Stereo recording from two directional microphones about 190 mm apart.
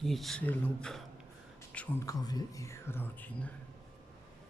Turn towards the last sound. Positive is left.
turn(degrees=10)  # may be behind; listen again after turning